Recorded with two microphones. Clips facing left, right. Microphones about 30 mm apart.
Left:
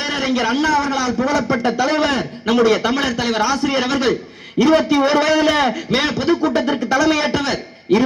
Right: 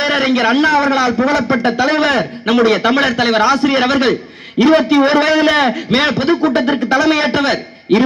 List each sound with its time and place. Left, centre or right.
0.0 s a man's voice: right